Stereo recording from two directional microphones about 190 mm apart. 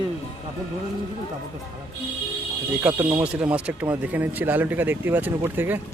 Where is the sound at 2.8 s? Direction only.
5° right (ahead or behind).